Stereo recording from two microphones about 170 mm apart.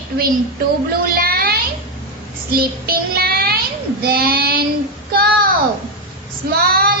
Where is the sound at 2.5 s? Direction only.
65° right (ahead or behind).